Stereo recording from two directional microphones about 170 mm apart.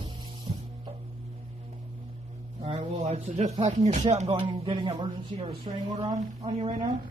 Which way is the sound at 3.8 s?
45° right (ahead or behind).